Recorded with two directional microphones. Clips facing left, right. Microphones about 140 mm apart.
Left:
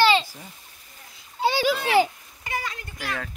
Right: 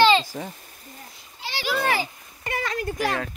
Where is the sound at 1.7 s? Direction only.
50° right (ahead or behind).